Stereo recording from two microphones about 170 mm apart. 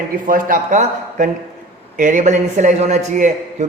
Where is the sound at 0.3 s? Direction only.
55° right (ahead or behind).